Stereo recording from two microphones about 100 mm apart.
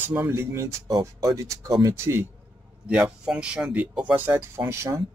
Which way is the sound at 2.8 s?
10° right (ahead or behind).